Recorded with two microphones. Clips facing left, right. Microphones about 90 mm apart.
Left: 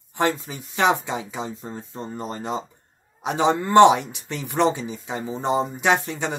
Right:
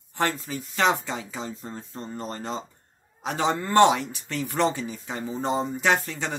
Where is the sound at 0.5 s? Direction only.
15° left (ahead or behind).